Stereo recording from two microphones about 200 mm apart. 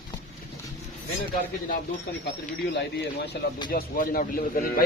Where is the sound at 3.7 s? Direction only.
45° left (ahead or behind).